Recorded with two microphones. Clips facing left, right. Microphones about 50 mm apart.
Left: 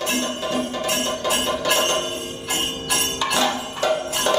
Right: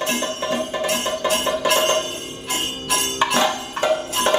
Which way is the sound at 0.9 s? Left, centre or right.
Centre.